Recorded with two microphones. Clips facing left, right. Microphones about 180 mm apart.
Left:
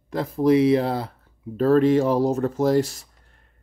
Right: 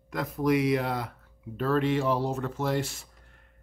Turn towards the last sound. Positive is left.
turn(degrees=40)  # may be behind; listen again after turning